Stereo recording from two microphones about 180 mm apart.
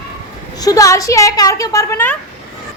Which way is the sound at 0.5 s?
20° left (ahead or behind).